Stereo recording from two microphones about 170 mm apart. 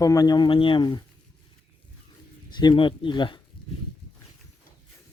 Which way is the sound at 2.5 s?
25° left (ahead or behind).